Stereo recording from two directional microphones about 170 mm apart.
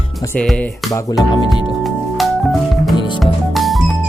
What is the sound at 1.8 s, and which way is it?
Music, centre (ahead or behind).